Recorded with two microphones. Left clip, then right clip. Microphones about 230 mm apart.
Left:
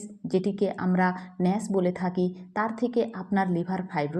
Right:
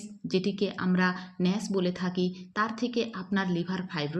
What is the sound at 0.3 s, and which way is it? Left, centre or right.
Speech, left.